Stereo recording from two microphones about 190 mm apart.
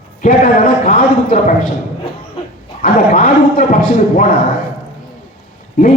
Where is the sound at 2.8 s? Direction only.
45° left (ahead or behind).